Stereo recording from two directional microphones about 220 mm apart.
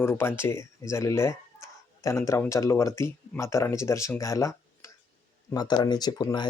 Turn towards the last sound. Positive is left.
turn(degrees=15)  # may be behind; listen again after turning